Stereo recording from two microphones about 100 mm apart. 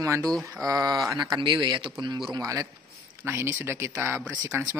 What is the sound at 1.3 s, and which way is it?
Speech, 50° right (ahead or behind).